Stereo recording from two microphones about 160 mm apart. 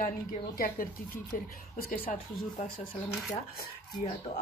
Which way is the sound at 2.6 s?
45° left (ahead or behind).